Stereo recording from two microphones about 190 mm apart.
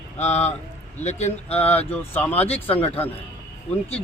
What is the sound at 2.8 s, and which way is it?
Speech, 10° left (ahead or behind).